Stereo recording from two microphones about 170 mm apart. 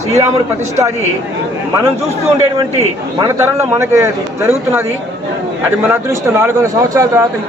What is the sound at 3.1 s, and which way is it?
A man's voice, 15° right (ahead or behind).